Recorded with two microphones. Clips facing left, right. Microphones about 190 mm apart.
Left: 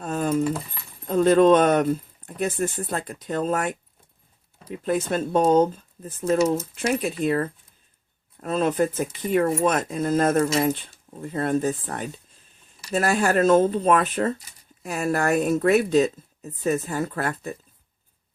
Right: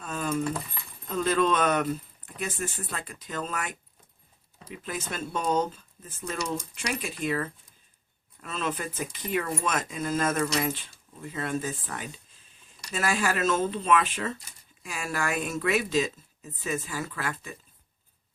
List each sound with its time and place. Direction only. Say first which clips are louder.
0.0 s keys jangling: left 6 dB; 45° left (ahead or behind)
1.0 s speech: left 9 dB; 45° left (ahead or behind)
10.6 s speech: left 7 dB; 50° left (ahead or behind)
16.9 s speech: left 7 dB; 50° left (ahead or behind)